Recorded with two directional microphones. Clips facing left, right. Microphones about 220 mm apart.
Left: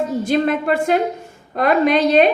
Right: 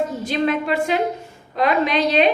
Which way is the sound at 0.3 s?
50° left (ahead or behind).